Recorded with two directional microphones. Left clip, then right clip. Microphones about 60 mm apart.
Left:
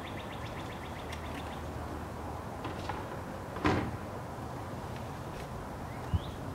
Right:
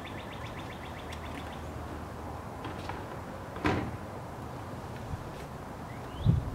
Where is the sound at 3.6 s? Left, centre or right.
Right.